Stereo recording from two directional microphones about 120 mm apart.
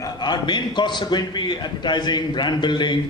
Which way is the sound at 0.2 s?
40° left (ahead or behind).